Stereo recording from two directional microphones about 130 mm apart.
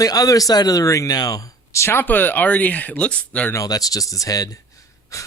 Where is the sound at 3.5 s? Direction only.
25° left (ahead or behind).